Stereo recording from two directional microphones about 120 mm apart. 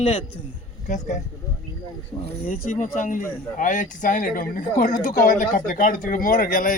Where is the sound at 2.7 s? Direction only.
90° left.